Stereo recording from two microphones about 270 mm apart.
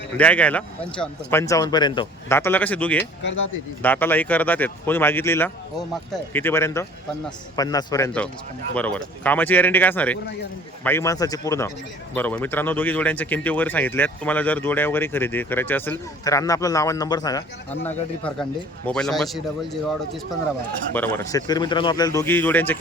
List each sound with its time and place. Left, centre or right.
0.2 s speech: centre
3.2 s speech: left
3.8 s speech: centre
20.9 s speech: centre